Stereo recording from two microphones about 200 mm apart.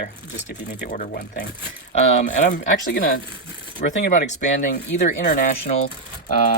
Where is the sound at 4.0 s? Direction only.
40° left (ahead or behind).